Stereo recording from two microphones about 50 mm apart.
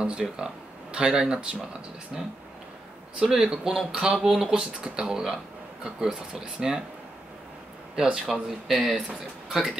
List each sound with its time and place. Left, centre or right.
0.0 s speech: centre
7.9 s speech: centre